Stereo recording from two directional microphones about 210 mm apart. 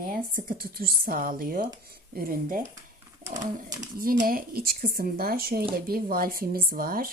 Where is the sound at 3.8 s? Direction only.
40° right (ahead or behind).